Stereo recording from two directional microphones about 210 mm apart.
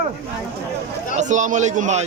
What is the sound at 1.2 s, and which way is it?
Speech, 35° right (ahead or behind).